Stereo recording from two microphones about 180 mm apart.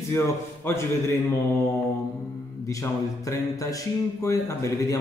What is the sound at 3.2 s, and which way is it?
A man's voice, 15° left (ahead or behind).